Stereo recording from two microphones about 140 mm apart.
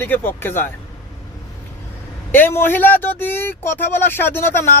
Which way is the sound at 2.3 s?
15° left (ahead or behind).